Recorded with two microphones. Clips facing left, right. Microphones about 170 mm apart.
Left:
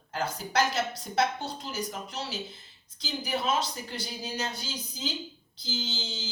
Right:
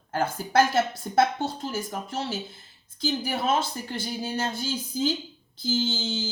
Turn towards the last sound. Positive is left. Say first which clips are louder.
# right 9 dB
turn(degrees=-50)  # may be behind; listen again after turning